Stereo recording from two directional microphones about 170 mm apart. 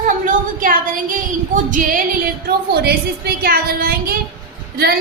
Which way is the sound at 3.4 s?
60° right (ahead or behind).